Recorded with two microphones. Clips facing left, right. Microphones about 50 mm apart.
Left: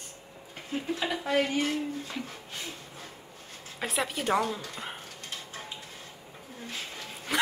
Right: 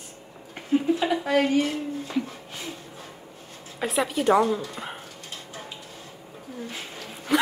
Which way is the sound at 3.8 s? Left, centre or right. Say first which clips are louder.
Right 6 dB; centre.